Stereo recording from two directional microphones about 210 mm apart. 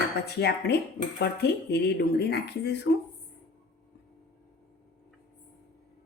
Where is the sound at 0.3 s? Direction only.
50° left (ahead or behind).